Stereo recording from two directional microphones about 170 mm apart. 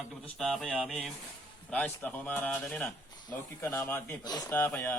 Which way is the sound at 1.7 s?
10° left (ahead or behind).